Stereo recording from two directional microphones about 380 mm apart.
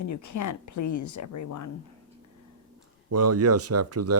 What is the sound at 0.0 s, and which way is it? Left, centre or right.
Speech, left.